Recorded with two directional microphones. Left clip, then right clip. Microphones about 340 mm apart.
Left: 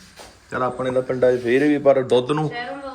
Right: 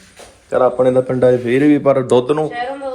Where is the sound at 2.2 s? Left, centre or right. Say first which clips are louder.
Right 6 dB; centre.